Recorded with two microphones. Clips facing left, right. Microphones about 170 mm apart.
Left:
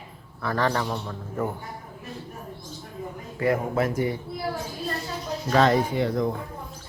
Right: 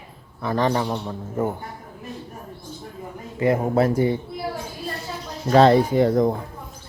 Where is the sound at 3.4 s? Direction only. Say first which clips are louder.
Right 4 dB; 25° right (ahead or behind).